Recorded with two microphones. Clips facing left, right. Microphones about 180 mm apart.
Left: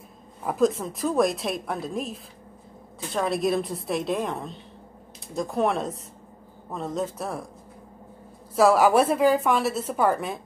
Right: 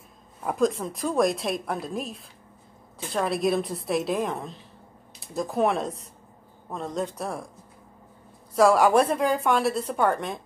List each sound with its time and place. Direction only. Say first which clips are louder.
0.4 s a woman's voice: left 1 dB; centre (ahead or behind)
8.5 s a woman's voice: even; centre (ahead or behind)